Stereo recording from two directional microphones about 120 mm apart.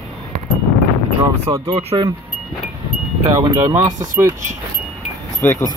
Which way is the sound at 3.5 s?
20° right (ahead or behind).